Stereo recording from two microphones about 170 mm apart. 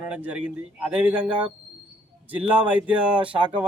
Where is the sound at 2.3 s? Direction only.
10° right (ahead or behind).